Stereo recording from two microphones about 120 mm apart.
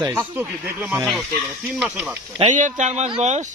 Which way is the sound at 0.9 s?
Centre (ahead or behind).